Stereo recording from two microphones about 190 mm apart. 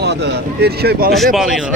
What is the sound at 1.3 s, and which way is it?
Speech, centre (ahead or behind).